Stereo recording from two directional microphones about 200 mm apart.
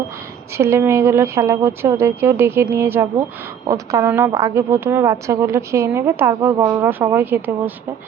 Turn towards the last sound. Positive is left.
turn(degrees=-10)  # may be behind; listen again after turning